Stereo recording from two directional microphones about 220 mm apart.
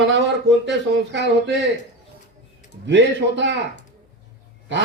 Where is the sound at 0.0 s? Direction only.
55° right (ahead or behind).